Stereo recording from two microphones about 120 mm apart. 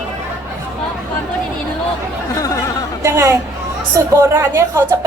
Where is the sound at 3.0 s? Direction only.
25° right (ahead or behind).